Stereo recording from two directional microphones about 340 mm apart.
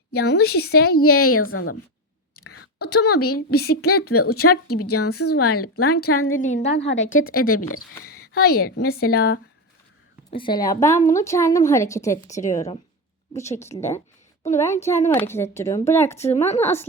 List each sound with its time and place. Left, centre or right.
0.1 s a woman's voice: left
2.3 s a sound: left
2.9 s a woman's voice: left
6.3 s a woman's voice: left
6.8 s a woman's voice: left
8.3 s a woman's voice: left
10.3 s a woman's voice: centre